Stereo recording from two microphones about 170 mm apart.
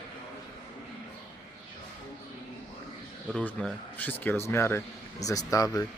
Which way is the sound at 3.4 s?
10° left (ahead or behind).